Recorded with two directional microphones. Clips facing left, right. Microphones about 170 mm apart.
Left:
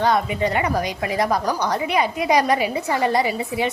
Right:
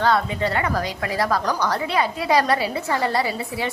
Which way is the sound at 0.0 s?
15° left (ahead or behind).